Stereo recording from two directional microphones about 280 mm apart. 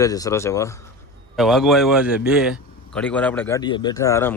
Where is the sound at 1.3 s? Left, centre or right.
Centre.